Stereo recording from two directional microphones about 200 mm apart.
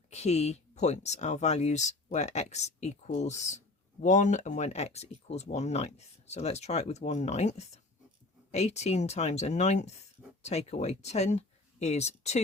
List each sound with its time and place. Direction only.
0.1 s speech: 35° left (ahead or behind)